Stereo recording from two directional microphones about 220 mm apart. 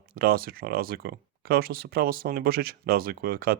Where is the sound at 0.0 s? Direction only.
45° right (ahead or behind).